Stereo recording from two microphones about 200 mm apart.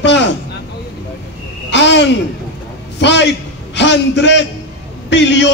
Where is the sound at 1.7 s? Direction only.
60° left (ahead or behind).